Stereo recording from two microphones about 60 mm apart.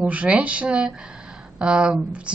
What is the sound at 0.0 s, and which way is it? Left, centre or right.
A woman's voice, right.